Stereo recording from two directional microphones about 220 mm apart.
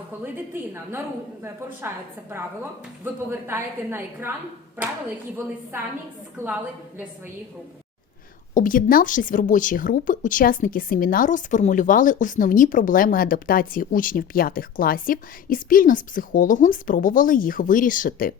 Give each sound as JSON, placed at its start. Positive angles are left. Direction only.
{"t": 0.5, "sound": "a woman's voice", "side_deg": -10}
{"t": 3.0, "sound": "a woman's voice", "side_deg": -10}
{"t": 6.4, "sound": "a woman's voice", "side_deg": -10}
{"t": 8.5, "sound": "a woman's voice", "side_deg": 40}